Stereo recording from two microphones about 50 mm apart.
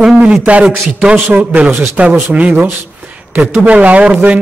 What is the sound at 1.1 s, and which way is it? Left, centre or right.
Speech, right.